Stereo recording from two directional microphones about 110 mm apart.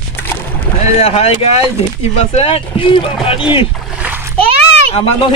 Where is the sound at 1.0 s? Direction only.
60° left (ahead or behind).